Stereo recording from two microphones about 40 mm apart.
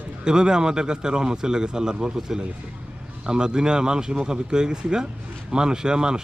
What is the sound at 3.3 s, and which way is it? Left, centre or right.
A man's voice, centre.